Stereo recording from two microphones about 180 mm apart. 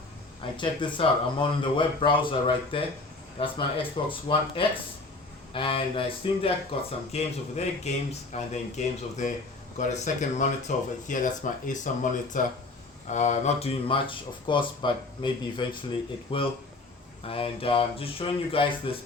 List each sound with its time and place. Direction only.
0.4 s speech: 25° left (ahead or behind)